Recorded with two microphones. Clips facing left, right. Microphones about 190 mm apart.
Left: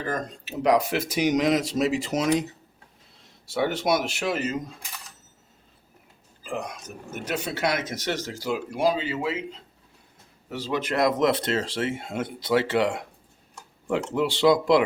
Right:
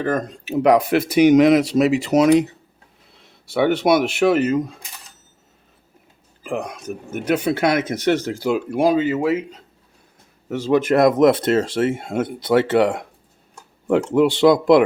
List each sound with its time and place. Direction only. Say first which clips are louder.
0.0 s speech: right 8 dB; 55° right (ahead or behind)
6.4 s speech: right 6 dB; 60° right (ahead or behind)
10.5 s speech: right 10 dB; 50° right (ahead or behind)